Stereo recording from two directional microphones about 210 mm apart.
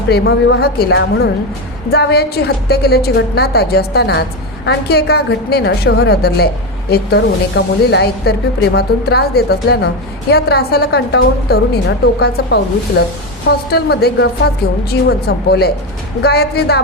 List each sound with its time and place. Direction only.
0.1 s a woman's voice: 50° left (ahead or behind)